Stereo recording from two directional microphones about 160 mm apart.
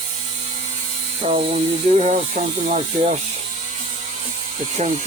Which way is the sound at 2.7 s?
45° right (ahead or behind).